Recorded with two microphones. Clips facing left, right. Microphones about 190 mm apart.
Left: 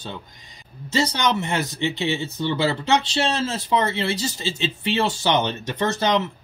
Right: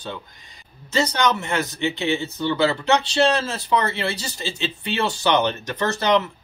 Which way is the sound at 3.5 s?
20° left (ahead or behind).